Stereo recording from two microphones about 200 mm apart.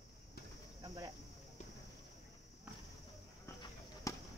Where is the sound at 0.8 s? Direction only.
15° right (ahead or behind).